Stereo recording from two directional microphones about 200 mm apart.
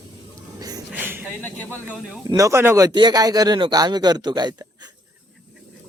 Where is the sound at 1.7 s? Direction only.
5° right (ahead or behind).